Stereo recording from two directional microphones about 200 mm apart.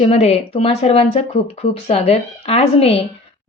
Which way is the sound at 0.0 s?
30° left (ahead or behind).